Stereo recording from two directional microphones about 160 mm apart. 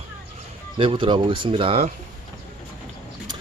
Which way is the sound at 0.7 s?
30° right (ahead or behind).